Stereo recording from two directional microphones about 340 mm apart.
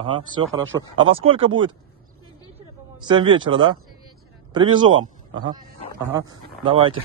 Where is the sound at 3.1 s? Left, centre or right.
Centre.